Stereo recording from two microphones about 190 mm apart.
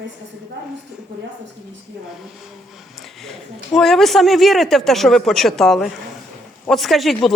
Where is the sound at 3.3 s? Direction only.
Centre (ahead or behind).